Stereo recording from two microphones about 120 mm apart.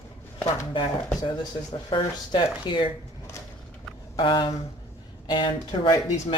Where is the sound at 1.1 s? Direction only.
35° left (ahead or behind).